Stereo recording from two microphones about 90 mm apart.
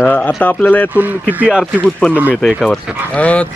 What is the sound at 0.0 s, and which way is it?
Speech, 15° left (ahead or behind).